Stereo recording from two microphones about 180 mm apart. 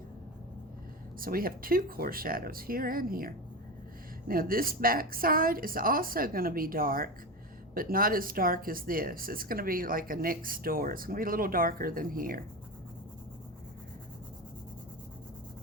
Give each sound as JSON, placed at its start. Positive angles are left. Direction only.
{"t": 1.2, "sound": "speech", "side_deg": -55}